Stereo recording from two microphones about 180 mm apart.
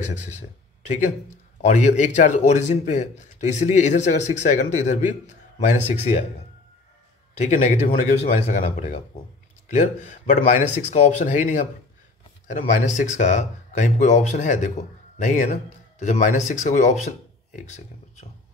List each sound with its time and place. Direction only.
0.8 s a man's voice: 40° left (ahead or behind)
7.3 s a man's voice: 40° left (ahead or behind)